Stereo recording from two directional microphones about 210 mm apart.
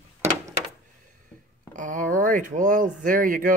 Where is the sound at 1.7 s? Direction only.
40° right (ahead or behind).